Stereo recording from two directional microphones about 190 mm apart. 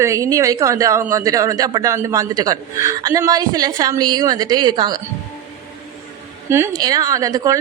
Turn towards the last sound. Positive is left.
turn(degrees=-20)  # may be behind; listen again after turning